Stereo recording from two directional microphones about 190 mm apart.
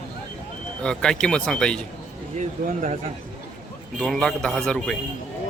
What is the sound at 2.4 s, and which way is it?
Speech, 40° right (ahead or behind).